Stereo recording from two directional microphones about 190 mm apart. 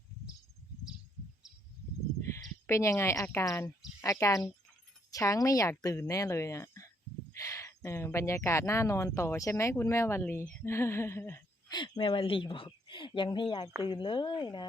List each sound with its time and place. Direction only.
2.3 s speech: 15° left (ahead or behind)
10.6 s a sound: 15° left (ahead or behind)
11.8 s a woman's voice: 25° left (ahead or behind)